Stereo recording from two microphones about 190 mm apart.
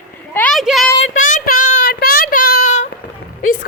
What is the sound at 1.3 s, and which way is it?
Child singing, 45° left (ahead or behind).